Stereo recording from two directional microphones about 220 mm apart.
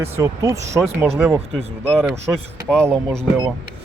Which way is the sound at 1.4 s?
25° right (ahead or behind).